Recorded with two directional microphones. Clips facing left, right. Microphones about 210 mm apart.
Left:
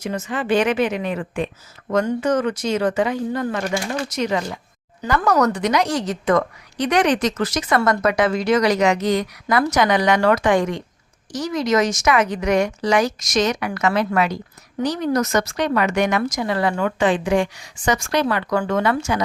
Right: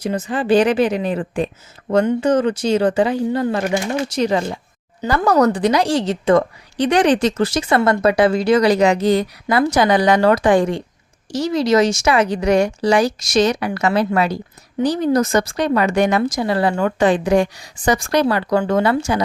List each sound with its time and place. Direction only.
0.0 s a woman's voice: 35° right (ahead or behind)